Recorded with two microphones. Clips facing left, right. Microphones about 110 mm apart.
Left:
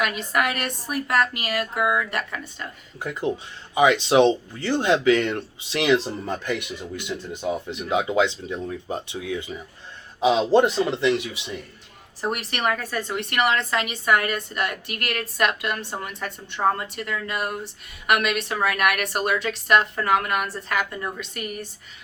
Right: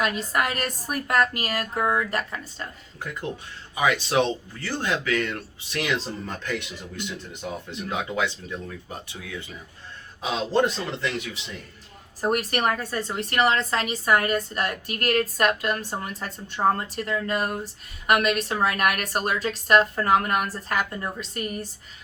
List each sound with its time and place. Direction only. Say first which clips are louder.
0.0 s a woman's voice: left 1 dB; 35° right (ahead or behind)
3.8 s speech: left 6 dB; 25° left (ahead or behind)
12.3 s a woman's voice: right 2 dB; 40° right (ahead or behind)